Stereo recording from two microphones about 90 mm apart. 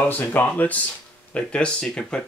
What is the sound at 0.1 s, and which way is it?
Speech, 20° left (ahead or behind).